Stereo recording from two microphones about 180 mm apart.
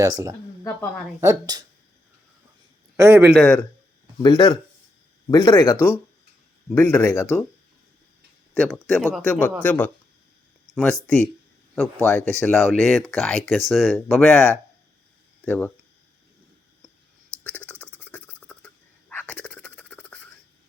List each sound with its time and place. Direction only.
0.0 s speech: 20° right (ahead or behind)
3.0 s speech: 15° right (ahead or behind)
3.3 s speech: 5° left (ahead or behind)
4.2 s speech: 25° left (ahead or behind)
6.7 s speech: 10° left (ahead or behind)
8.5 s speech: centre (ahead or behind)
11.0 s speech: 5° left (ahead or behind)
15.4 s speech: 10° left (ahead or behind)
17.5 s a sound: 10° left (ahead or behind)